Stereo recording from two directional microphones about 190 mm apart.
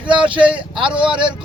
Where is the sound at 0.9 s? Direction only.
5° right (ahead or behind).